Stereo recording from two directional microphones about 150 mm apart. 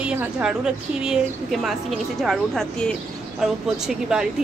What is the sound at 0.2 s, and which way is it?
A woman's voice, 5° right (ahead or behind).